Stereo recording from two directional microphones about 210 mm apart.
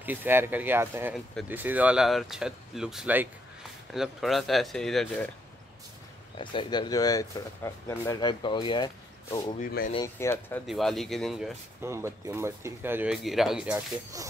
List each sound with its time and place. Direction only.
0.0 s speech: 10° right (ahead or behind)
6.3 s speech: 25° left (ahead or behind)
10.7 s speech: centre (ahead or behind)
11.8 s speech: 10° right (ahead or behind)